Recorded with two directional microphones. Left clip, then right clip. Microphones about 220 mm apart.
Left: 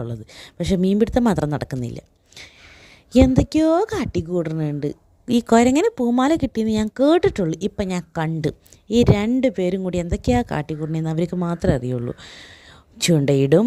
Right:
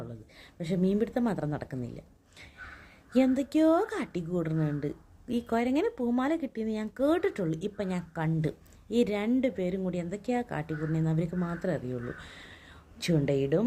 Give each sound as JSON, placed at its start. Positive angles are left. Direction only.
{"t": 0.0, "sound": "a woman's voice", "side_deg": 50}